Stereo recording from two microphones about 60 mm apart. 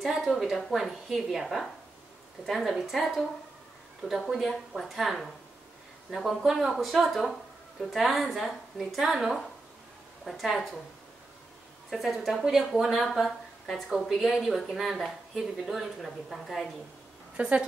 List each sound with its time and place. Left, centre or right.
0.3 s a woman's voice: centre
4.3 s a woman's voice: centre
11.9 s a woman's voice: centre
17.4 s a woman's voice: centre